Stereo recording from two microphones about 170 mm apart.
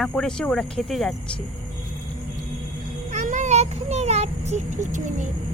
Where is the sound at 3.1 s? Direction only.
45° right (ahead or behind).